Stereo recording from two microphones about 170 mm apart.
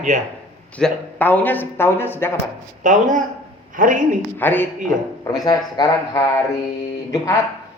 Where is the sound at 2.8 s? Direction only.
50° right (ahead or behind).